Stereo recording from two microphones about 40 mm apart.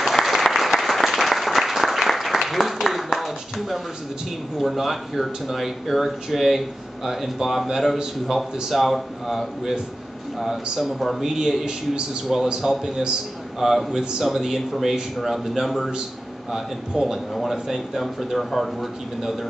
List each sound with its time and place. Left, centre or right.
0.0 s applause: centre
4.6 s speech: centre
17.0 s speech: centre